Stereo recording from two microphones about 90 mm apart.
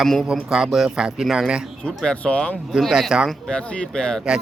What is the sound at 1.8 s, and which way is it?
Speech, 10° left (ahead or behind).